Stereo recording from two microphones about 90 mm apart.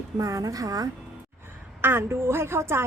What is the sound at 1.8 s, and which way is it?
A woman's voice, 25° right (ahead or behind).